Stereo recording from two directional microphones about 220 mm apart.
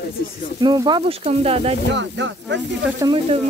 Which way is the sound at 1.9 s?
55° right (ahead or behind).